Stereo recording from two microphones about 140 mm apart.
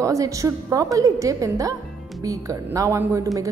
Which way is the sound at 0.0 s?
25° right (ahead or behind).